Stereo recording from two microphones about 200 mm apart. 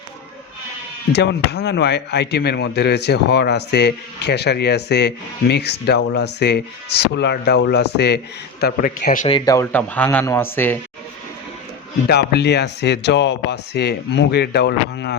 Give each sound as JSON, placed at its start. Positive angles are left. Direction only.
{"t": 1.1, "sound": "speech", "side_deg": 55}
{"t": 8.6, "sound": "a man's voice", "side_deg": 45}
{"t": 9.3, "sound": "speech", "side_deg": 15}
{"t": 12.0, "sound": "speech", "side_deg": 55}